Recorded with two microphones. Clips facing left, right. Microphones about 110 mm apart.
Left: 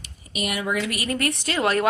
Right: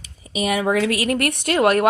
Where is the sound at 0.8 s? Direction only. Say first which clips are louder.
Right 6 dB; 90° right; by 1.8 s 55° right (ahead or behind).